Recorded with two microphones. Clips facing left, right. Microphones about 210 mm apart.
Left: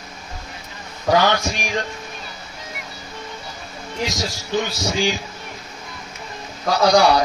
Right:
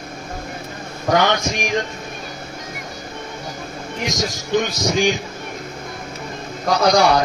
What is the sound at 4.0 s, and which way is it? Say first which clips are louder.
A man's voice: right 1 dB; 20° right (ahead or behind).